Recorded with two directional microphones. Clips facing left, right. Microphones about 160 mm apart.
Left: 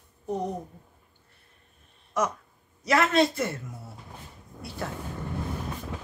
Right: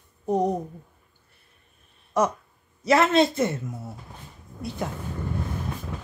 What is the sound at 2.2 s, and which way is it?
A man's voice, 30° right (ahead or behind).